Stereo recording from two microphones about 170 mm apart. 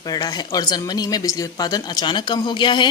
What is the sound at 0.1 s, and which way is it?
Speech, 25° left (ahead or behind).